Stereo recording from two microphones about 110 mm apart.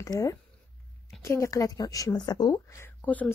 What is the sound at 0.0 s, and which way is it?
Speech, 30° left (ahead or behind).